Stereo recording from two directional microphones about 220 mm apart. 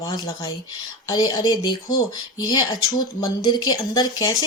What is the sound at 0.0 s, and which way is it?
Speech, 15° left (ahead or behind).